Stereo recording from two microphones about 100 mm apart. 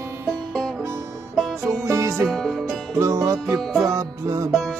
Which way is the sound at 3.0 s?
30° right (ahead or behind).